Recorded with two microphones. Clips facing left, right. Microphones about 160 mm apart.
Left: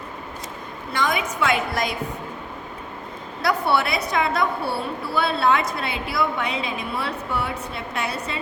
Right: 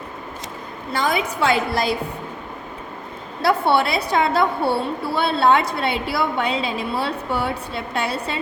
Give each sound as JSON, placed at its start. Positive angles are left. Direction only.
{"t": 0.9, "sound": "a woman's voice", "side_deg": -35}
{"t": 3.4, "sound": "a woman's voice", "side_deg": -25}